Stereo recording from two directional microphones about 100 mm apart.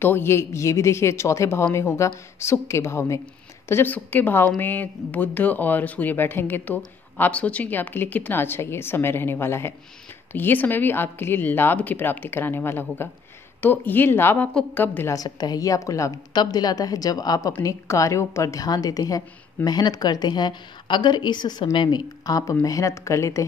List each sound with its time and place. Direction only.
0.0 s speech: 20° left (ahead or behind)
15.1 s a woman's voice: 45° left (ahead or behind)